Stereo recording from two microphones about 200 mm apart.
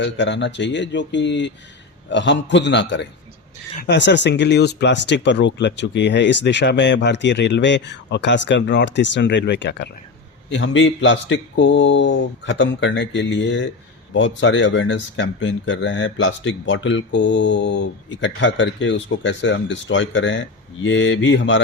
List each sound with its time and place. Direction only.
0.0 s speech: 60° left (ahead or behind)
10.5 s speech: 75° left (ahead or behind)